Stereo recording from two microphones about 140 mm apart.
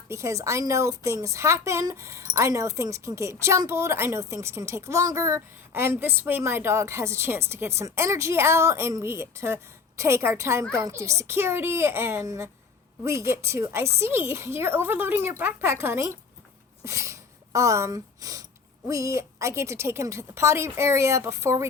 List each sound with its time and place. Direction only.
0.1 s a woman's voice: 20° right (ahead or behind)